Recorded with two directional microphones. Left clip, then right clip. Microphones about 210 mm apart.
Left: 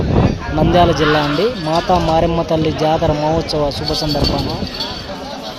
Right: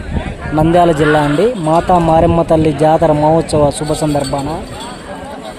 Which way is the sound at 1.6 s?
20° right (ahead or behind).